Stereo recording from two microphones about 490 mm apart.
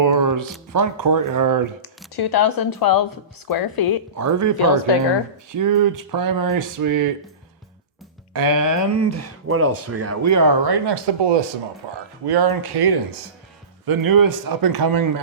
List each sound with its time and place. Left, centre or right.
0.0 s a sound: right
0.7 s speech: right
2.1 s speech: left
4.2 s speech: right
5.5 s speech: right
8.3 s speech: right